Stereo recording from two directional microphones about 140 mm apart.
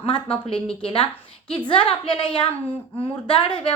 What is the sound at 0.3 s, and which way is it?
Speech, 5° left (ahead or behind).